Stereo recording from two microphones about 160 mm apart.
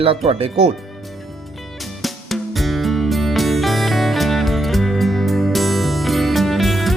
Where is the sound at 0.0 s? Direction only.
35° right (ahead or behind).